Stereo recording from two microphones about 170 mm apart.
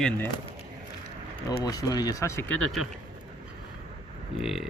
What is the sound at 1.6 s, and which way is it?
Speech, 20° left (ahead or behind).